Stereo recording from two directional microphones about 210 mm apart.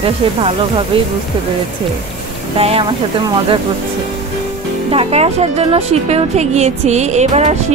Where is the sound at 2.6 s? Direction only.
25° right (ahead or behind).